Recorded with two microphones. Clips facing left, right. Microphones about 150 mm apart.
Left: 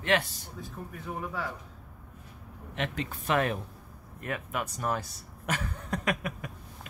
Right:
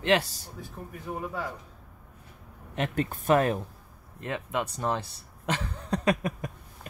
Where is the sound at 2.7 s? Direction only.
45° right (ahead or behind).